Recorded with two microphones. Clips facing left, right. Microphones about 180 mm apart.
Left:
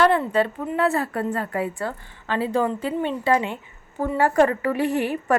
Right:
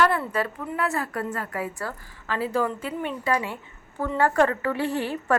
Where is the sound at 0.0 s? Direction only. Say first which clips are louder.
Left 4 dB; 20° left (ahead or behind).